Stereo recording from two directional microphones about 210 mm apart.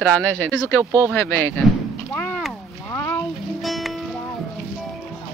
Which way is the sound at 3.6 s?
Centre (ahead or behind).